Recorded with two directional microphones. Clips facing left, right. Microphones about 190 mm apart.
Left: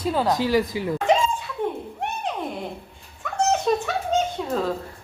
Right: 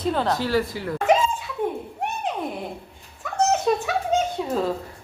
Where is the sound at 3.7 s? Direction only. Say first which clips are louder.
Right 1 dB; 5° right (ahead or behind).